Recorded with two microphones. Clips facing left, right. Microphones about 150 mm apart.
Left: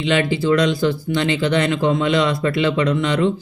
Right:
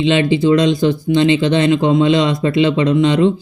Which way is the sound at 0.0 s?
20° right (ahead or behind).